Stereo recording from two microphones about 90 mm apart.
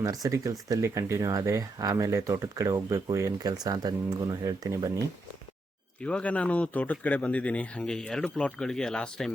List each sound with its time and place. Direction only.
0.0 s speech: 40° right (ahead or behind)
6.0 s speech: 10° left (ahead or behind)